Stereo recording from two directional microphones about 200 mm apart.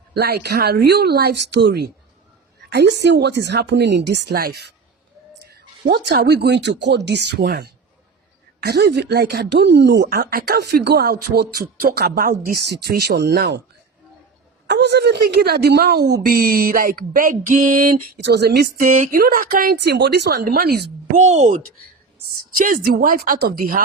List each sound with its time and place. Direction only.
0.1 s a woman's voice: 55° right (ahead or behind)
6.1 s a woman's voice: 55° right (ahead or behind)
14.7 s a woman's voice: 55° right (ahead or behind)
18.9 s a woman's voice: 40° right (ahead or behind)
21.2 s a woman's voice: 35° right (ahead or behind)